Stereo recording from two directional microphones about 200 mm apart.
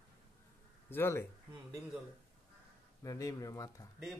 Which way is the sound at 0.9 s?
10° left (ahead or behind).